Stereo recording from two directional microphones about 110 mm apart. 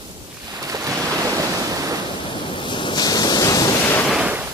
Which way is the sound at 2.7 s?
45° left (ahead or behind).